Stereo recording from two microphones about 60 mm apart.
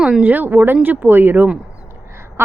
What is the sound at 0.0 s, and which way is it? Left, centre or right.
A woman's voice, right.